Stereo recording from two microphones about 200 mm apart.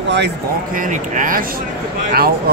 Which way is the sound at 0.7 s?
40° right (ahead or behind).